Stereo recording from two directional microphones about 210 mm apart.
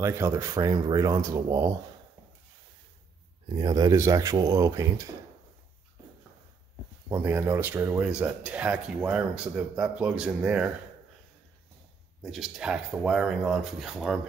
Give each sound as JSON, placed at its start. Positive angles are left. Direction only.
{"t": 0.0, "sound": "speech", "side_deg": -15}
{"t": 3.4, "sound": "speech", "side_deg": -20}
{"t": 7.1, "sound": "speech", "side_deg": -10}
{"t": 12.2, "sound": "speech", "side_deg": 0}